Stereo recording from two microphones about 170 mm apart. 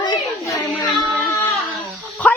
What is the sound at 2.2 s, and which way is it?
Dog, 5° left (ahead or behind).